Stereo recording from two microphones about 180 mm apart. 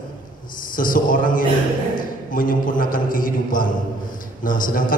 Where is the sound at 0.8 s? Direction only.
50° left (ahead or behind).